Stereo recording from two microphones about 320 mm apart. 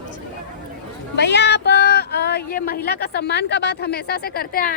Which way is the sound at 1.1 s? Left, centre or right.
Left.